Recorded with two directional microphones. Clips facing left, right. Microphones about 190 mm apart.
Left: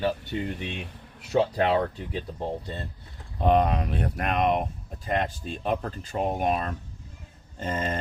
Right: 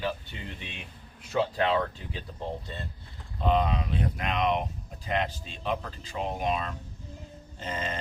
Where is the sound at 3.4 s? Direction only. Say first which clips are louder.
Left 4 dB; 55° left (ahead or behind).